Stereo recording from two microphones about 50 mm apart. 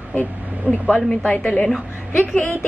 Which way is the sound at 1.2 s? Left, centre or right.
Left.